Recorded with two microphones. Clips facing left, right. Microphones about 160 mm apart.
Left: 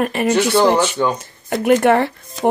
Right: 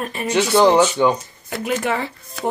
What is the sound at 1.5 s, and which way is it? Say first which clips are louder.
Speech: left 9 dB; 60° left (ahead or behind).